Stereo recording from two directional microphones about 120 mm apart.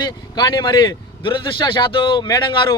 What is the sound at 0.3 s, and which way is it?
A man's voice, 40° left (ahead or behind).